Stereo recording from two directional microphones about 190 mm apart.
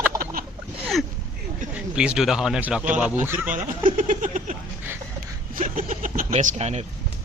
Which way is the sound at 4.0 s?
40° right (ahead or behind).